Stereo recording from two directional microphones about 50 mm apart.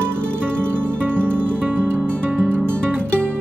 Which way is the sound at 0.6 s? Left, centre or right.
Right.